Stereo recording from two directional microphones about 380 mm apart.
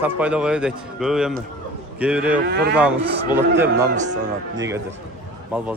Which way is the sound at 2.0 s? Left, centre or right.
Centre.